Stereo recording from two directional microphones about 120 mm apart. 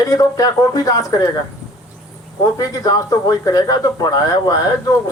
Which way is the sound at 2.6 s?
30° left (ahead or behind).